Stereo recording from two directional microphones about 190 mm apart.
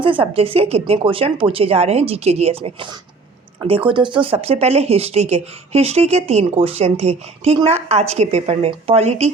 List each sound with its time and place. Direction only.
0.0 s speech: 30° right (ahead or behind)